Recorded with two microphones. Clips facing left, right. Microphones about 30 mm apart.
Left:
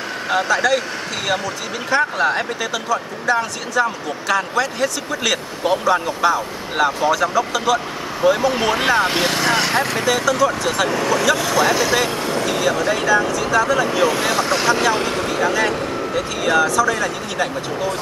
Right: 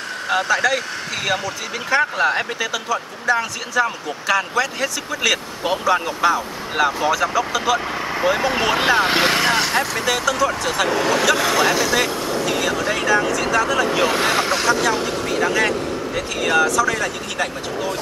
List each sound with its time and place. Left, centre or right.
0.3 s speech: centre
3.8 s speech: centre
4.6 s speech: centre
8.2 s speech: centre
9.5 s speech: centre
14.5 s speech: centre